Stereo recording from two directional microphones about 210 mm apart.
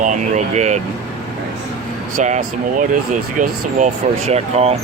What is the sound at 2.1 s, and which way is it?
Speech, 35° right (ahead or behind).